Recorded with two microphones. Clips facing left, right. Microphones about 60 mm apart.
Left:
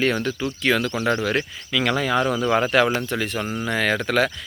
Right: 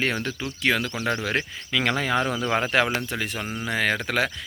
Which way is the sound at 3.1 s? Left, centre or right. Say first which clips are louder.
Left 4 dB; centre.